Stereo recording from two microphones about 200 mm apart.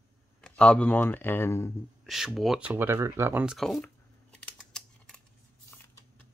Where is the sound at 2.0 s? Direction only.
Centre (ahead or behind).